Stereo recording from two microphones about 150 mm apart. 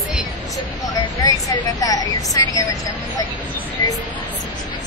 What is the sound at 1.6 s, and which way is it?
Speech, 25° left (ahead or behind).